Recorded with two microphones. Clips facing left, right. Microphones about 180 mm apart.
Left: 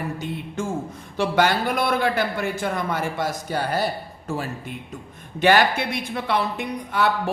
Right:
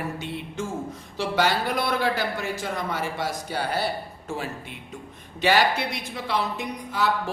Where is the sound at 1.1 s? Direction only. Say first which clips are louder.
Left 3 dB; 55° left (ahead or behind).